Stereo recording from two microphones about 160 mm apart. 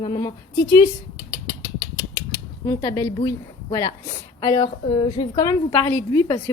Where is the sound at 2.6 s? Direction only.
20° left (ahead or behind).